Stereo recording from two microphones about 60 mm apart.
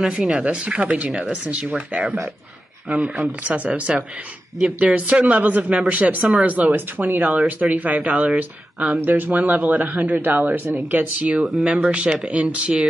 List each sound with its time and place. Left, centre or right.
0.0 s speech: centre
3.2 s speech: right
10.9 s speech: right